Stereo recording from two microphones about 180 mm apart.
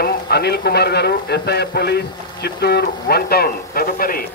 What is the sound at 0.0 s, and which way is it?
A man's voice, 65° left (ahead or behind).